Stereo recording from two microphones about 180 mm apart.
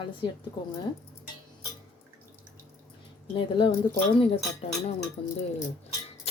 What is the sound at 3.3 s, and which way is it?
Speech, 30° left (ahead or behind).